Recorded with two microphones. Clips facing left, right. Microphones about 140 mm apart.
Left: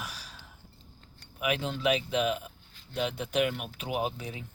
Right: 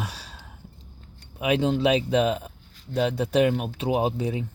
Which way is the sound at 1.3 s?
25° right (ahead or behind).